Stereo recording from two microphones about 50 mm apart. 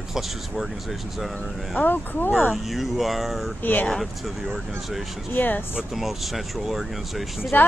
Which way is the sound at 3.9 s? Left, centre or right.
Centre.